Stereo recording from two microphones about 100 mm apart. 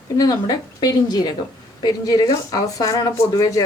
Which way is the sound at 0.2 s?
40° left (ahead or behind).